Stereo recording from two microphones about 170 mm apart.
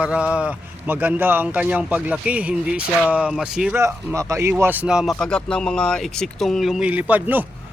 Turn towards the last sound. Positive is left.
turn(degrees=-10)  # may be behind; listen again after turning